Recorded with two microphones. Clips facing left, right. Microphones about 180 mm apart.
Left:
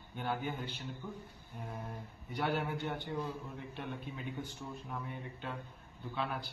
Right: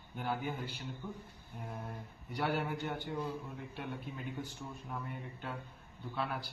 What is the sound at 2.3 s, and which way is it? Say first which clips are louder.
Speech: even; centre (ahead or behind).